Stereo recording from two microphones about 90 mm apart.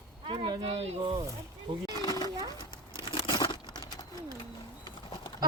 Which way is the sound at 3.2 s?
60° left (ahead or behind).